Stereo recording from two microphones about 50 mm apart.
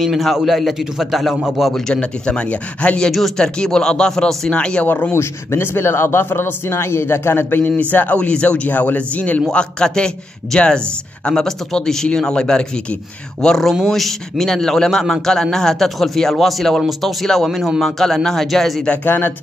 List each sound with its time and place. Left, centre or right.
0.0 s a man's voice: centre
2.0 s speech: left
3.1 s a man's voice: centre
4.5 s speech: left
5.1 s speech: left
7.7 s speech: left
8.2 s speech: left
9.5 s speech: centre
13.8 s a man's voice: centre
19.0 s speech: left